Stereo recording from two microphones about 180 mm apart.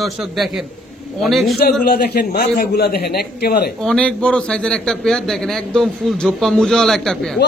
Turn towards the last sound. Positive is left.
turn(degrees=0)  # may be behind; listen again after turning